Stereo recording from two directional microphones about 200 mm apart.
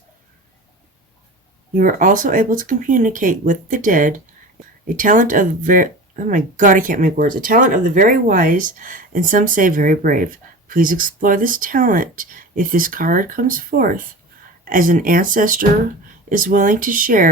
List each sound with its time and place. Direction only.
1.7 s speech: 40° right (ahead or behind)